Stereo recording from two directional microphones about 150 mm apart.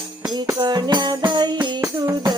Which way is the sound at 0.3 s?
30° right (ahead or behind).